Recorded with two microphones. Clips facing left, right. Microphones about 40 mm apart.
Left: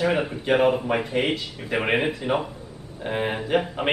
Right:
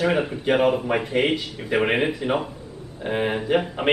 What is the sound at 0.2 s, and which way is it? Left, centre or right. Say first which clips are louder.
A man's voice: even; centre.